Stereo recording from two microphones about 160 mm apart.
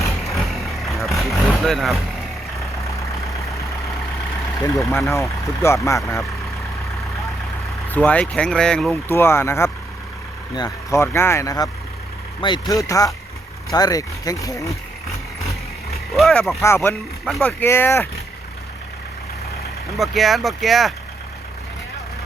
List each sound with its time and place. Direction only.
0.3 s vehicle: centre (ahead or behind)
4.6 s speech: 20° left (ahead or behind)
7.9 s speech: 10° left (ahead or behind); by 11.0 s 25° left (ahead or behind)
11.0 s speech: 15° left (ahead or behind)
15.9 s speech: centre (ahead or behind)
16.6 s speech: 15° left (ahead or behind)
20.0 s speech: centre (ahead or behind)